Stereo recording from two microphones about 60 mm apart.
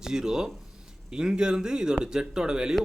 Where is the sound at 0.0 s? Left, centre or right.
Centre.